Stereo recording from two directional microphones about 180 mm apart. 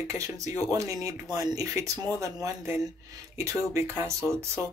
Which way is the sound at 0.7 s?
15° right (ahead or behind).